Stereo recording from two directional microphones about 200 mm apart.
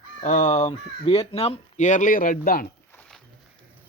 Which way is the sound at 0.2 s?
35° left (ahead or behind).